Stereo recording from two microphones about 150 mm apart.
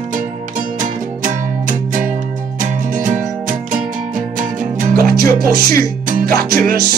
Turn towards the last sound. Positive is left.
turn(degrees=-80)